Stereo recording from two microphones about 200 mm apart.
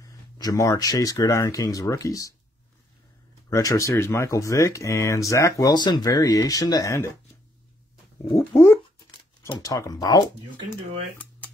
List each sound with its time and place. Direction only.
0.0 s speech: 20° left (ahead or behind)
3.4 s speech: 15° left (ahead or behind)
8.3 s speech: 15° left (ahead or behind)